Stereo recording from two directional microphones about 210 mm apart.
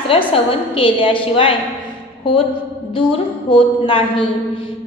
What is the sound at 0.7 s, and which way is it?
Speech, 25° left (ahead or behind).